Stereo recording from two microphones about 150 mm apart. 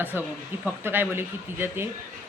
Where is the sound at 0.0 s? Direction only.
10° right (ahead or behind).